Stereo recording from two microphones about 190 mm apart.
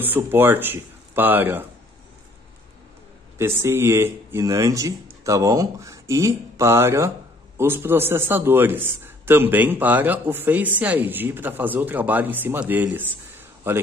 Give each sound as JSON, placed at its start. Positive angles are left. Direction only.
{"t": 0.0, "sound": "a man's voice", "side_deg": -10}
{"t": 3.3, "sound": "a man's voice", "side_deg": -15}